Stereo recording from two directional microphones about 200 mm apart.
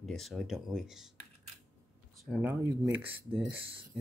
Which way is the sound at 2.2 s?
5° right (ahead or behind).